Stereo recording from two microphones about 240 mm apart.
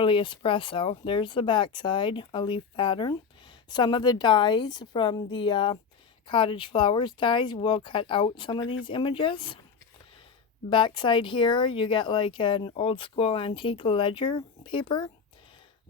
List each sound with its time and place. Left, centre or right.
0.0 s speech: left
10.7 s speech: centre